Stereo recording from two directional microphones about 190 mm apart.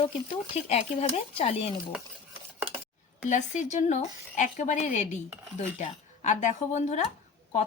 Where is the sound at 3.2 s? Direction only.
40° left (ahead or behind).